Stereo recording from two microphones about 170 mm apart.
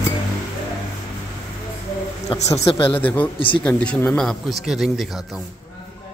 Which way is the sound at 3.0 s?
10° left (ahead or behind).